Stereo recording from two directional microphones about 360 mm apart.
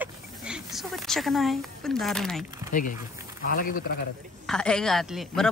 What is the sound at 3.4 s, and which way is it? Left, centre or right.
Speech, left.